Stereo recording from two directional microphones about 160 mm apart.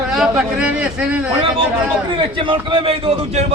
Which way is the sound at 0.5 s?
5° right (ahead or behind).